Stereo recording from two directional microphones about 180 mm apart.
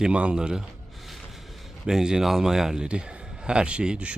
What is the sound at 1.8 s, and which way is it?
A man's voice, 5° right (ahead or behind).